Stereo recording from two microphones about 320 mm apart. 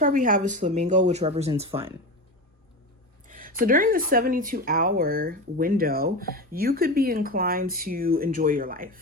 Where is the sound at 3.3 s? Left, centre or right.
Right.